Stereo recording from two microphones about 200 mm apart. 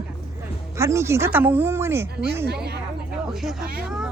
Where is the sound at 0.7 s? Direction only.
15° right (ahead or behind).